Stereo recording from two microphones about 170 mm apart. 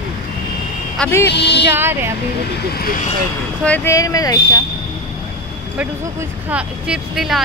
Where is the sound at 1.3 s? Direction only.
90° left.